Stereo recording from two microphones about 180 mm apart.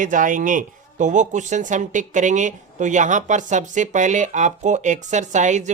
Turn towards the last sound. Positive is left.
turn(degrees=-40)  # may be behind; listen again after turning